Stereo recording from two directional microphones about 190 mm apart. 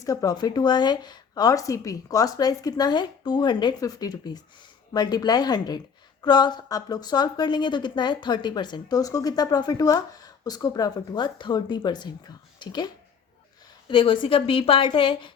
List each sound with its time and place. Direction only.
0.0 s a woman's voice: 20° left (ahead or behind)